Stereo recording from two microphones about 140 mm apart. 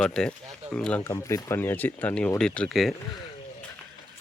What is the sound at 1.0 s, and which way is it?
Speech, 25° left (ahead or behind).